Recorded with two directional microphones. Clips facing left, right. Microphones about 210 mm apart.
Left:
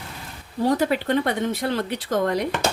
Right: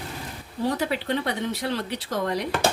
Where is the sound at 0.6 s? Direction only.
50° left (ahead or behind).